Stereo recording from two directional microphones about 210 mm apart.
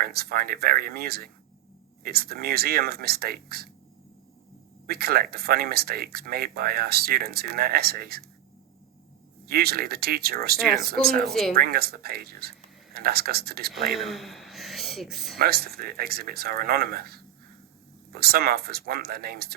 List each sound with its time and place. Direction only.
0.0 s speech: 45° right (ahead or behind)
4.9 s speech: 45° right (ahead or behind)
9.5 s speech: 45° right (ahead or behind)
11.3 s speech: centre (ahead or behind)
11.5 s speech: 45° right (ahead or behind)
13.9 s a man's voice: centre (ahead or behind)
15.4 s speech: 45° right (ahead or behind)